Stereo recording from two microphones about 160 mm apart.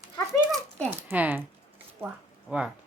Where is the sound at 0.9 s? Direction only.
15° right (ahead or behind).